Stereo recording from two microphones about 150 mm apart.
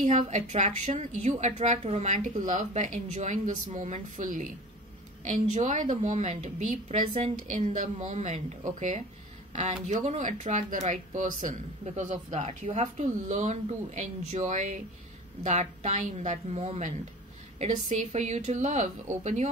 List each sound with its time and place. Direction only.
0.0 s speech: 50° right (ahead or behind)